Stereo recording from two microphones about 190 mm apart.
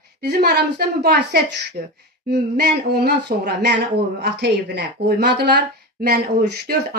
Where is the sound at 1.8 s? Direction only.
45° right (ahead or behind).